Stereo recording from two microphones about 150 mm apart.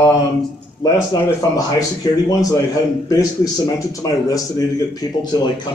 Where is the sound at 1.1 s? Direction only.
20° left (ahead or behind).